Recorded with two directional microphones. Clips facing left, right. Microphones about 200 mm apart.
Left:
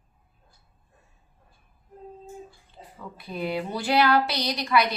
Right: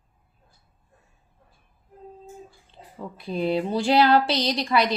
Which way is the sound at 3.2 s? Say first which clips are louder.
Right 5 dB; 30° right (ahead or behind).